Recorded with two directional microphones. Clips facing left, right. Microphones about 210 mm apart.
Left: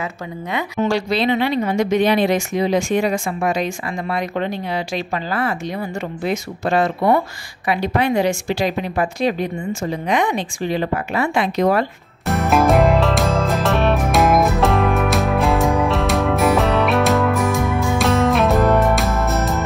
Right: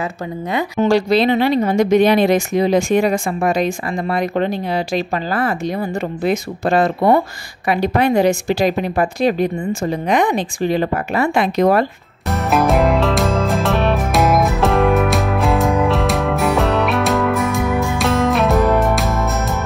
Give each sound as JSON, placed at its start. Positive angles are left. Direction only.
{"t": 0.5, "sound": "speech", "side_deg": -35}
{"t": 3.6, "sound": "speech", "side_deg": -35}
{"t": 12.4, "sound": "music", "side_deg": 0}